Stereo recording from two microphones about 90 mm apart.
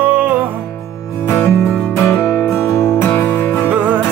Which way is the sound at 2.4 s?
30° left (ahead or behind).